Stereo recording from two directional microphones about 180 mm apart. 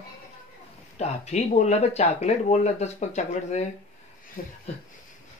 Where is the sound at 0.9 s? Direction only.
40° left (ahead or behind).